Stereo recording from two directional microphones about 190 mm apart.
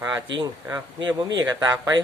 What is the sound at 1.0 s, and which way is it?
Speech, 20° right (ahead or behind).